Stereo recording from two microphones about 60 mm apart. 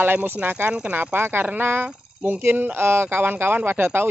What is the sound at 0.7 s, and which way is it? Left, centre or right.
Speech, right.